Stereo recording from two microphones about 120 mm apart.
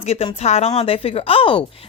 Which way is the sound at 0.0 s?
55° left (ahead or behind).